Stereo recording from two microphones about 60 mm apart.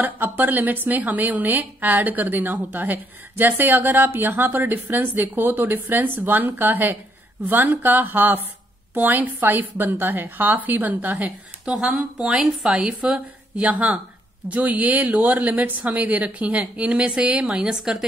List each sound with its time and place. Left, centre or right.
0.0 s a woman's voice: right; by 18.0 s centre